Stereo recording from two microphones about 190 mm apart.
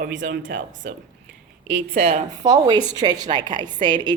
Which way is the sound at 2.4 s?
20° right (ahead or behind).